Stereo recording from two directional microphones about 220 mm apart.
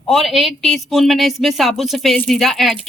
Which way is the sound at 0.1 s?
Centre (ahead or behind).